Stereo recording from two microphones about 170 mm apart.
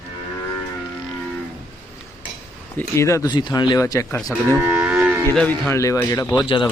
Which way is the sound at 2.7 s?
15° left (ahead or behind).